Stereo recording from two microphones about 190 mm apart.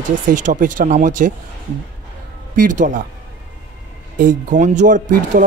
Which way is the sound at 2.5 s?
45° right (ahead or behind).